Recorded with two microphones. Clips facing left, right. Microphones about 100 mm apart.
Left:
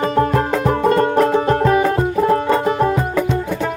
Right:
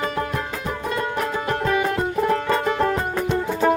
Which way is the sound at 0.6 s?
50° left (ahead or behind).